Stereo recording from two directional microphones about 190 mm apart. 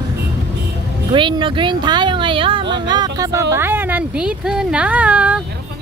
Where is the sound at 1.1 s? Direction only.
25° right (ahead or behind); by 5.4 s 5° right (ahead or behind).